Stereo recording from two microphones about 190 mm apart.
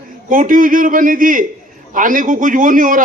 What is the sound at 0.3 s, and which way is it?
Speech, 45° right (ahead or behind).